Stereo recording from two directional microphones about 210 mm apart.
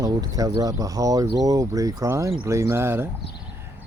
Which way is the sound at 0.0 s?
15° right (ahead or behind).